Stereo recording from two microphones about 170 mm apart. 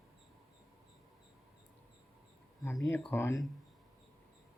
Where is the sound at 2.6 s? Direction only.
20° left (ahead or behind).